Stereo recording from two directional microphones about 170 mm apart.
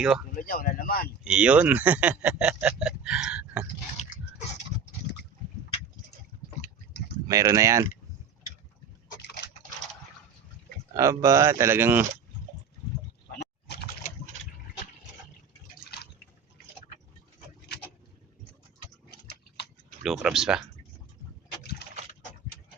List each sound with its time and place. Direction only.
0.0 s speech: 5° right (ahead or behind)
0.3 s speech: 55° left (ahead or behind)
1.2 s speech: 5° right (ahead or behind)
4.0 s pig: 45° left (ahead or behind)
7.3 s speech: 20° right (ahead or behind)
10.9 s speech: 20° right (ahead or behind)
13.3 s vehicle: 70° left (ahead or behind)
20.0 s speech: 5° right (ahead or behind)